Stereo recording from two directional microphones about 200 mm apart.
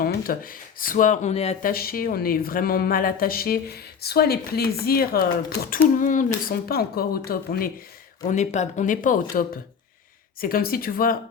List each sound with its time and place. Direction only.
0.0 s speech: 45° left (ahead or behind)
1.7 s speech: 50° left (ahead or behind)
8.2 s speech: 40° left (ahead or behind)